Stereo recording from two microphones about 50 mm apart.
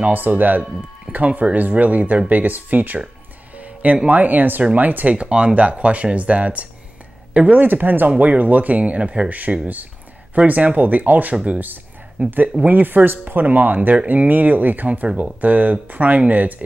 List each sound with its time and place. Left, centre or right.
0.0 s speech: right
5.1 s speech: right
9.3 s speech: right
15.0 s speech: centre
15.4 s speech: right